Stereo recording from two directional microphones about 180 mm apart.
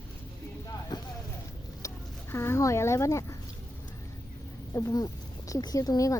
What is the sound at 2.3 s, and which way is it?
Speech, 15° left (ahead or behind).